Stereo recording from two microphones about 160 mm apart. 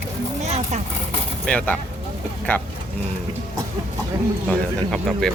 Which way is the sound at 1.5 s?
10° left (ahead or behind).